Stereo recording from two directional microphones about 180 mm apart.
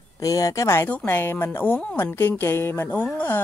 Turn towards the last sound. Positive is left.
turn(degrees=10)  # may be behind; listen again after turning